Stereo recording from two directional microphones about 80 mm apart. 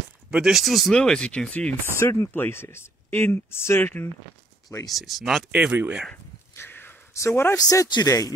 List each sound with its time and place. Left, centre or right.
0.3 s speech: centre
1.9 s speech: left
4.8 s speech: centre
5.5 s speech: centre
6.5 s a sound: left
7.2 s speech: left
7.5 s speech: left